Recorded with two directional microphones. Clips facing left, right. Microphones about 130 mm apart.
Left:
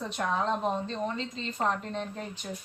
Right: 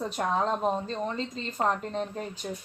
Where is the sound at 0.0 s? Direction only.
40° right (ahead or behind).